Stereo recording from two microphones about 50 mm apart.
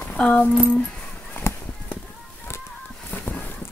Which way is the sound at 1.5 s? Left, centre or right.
Left.